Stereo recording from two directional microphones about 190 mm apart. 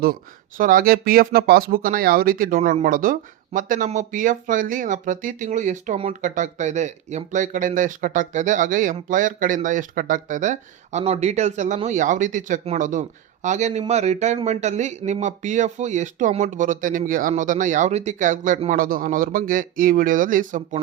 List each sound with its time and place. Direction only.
0.0 s speech: 45° right (ahead or behind)
2.6 s speech: 35° right (ahead or behind)
2.8 s speech: 45° right (ahead or behind)